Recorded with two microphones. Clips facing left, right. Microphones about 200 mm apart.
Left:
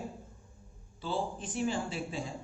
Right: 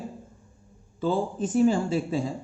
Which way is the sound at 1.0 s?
45° right (ahead or behind).